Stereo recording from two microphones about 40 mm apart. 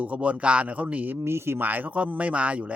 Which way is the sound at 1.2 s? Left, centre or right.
Right.